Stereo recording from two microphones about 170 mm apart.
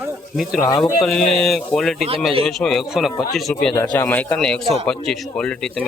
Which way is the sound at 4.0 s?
10° left (ahead or behind).